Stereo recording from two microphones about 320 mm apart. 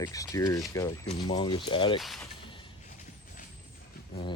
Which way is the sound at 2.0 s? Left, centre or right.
Centre.